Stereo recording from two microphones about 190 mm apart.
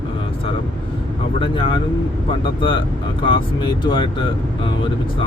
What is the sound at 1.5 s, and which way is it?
Speech, 25° left (ahead or behind).